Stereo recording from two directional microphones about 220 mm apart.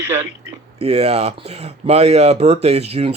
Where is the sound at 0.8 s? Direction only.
30° right (ahead or behind).